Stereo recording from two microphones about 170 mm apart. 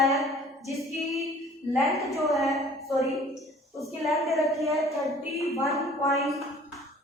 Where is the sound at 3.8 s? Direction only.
Centre (ahead or behind).